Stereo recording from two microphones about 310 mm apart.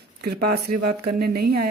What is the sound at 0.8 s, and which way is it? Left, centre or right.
Speech, right.